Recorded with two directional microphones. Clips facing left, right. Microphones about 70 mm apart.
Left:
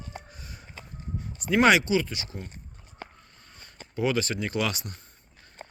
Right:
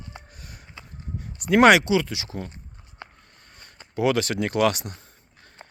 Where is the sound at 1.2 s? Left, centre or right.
Right.